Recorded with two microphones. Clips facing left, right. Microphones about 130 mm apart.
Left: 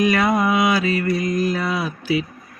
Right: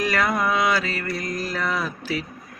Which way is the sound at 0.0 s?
15° left (ahead or behind).